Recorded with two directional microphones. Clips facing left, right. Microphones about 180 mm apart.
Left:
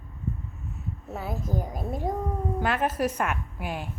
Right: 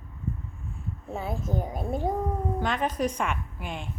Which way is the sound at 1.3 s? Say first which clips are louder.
Even; 25° right (ahead or behind).